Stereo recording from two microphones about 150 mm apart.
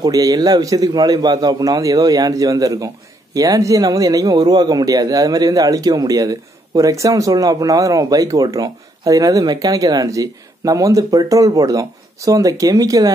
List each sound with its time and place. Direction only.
0.0 s speech: 25° right (ahead or behind)